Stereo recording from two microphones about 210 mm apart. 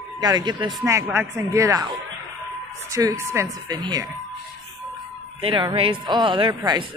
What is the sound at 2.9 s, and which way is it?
Speech, 15° right (ahead or behind).